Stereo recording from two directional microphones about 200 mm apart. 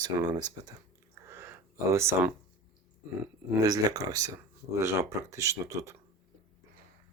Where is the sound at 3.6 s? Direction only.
20° right (ahead or behind).